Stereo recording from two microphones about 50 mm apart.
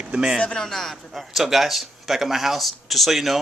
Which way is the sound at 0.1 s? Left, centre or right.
Centre.